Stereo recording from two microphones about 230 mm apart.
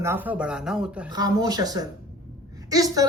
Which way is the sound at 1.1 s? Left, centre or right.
Centre.